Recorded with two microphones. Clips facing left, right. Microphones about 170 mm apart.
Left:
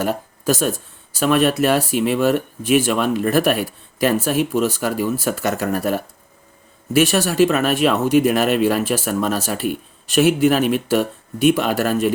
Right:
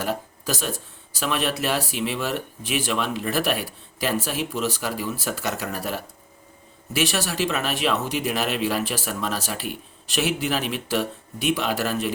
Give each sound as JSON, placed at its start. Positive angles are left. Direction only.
{"t": 0.0, "sound": "speech", "side_deg": 50}